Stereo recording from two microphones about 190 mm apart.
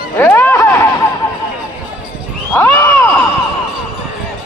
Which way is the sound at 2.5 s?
10° left (ahead or behind).